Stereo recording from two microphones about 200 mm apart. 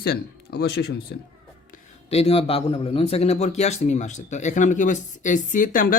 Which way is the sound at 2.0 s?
30° left (ahead or behind).